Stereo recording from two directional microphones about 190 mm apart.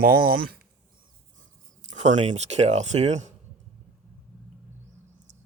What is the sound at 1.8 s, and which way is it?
Speech, 40° right (ahead or behind).